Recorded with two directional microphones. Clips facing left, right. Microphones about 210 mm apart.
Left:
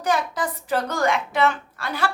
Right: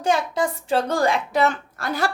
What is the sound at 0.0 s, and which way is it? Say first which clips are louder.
A woman's voice: right 2 dB; 25° right (ahead or behind).